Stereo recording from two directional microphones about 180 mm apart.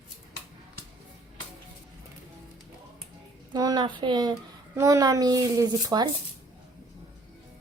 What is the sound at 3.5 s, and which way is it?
Speech, 20° right (ahead or behind).